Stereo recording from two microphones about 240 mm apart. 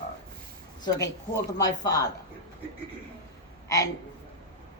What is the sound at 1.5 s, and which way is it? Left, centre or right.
Speech, centre.